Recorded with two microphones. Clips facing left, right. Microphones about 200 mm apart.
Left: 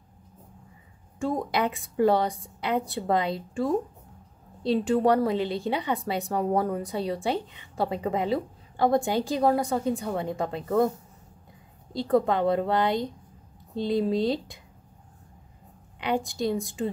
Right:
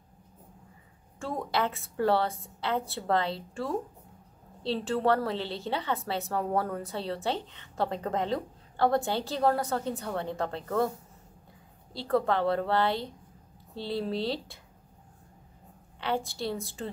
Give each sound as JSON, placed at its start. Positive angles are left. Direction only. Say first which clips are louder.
{"t": 1.2, "sound": "a woman's voice", "louder": "left 4 dB", "side_deg": 15}
{"t": 11.9, "sound": "a woman's voice", "louder": "left 4 dB", "side_deg": 15}
{"t": 16.0, "sound": "a woman's voice", "louder": "left 4 dB", "side_deg": 15}